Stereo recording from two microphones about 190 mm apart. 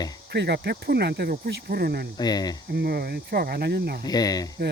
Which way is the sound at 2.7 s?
55° right (ahead or behind).